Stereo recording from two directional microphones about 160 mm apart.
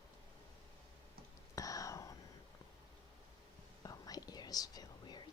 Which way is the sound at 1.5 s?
20° left (ahead or behind).